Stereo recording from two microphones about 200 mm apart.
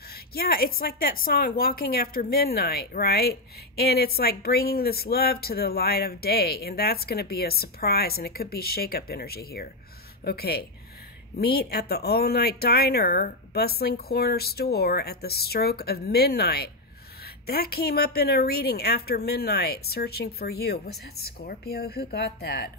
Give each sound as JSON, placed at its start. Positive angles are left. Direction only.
{"t": 0.1, "sound": "a woman's voice", "side_deg": 50}